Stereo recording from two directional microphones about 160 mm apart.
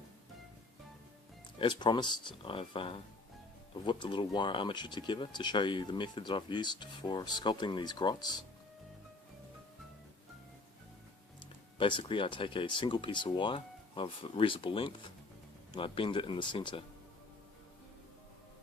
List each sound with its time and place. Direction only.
1.5 s speech: 30° left (ahead or behind)
11.8 s speech: 30° left (ahead or behind)